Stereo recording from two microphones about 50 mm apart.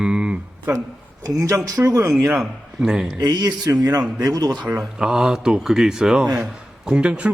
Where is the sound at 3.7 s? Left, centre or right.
Right.